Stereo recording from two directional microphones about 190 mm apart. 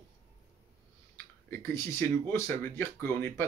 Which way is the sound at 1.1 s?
15° left (ahead or behind).